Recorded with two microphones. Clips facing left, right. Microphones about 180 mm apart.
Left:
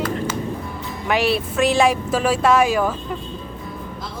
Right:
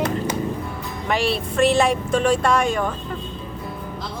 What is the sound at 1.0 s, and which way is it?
Speech, 5° left (ahead or behind).